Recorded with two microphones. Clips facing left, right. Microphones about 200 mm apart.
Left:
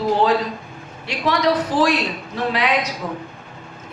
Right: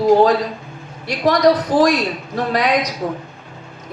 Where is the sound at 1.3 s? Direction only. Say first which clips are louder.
Right 5 dB; 40° right (ahead or behind).